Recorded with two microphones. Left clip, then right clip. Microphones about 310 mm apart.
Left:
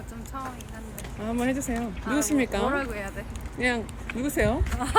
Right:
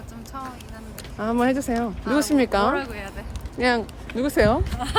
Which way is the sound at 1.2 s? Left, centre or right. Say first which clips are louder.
Right 7 dB; right.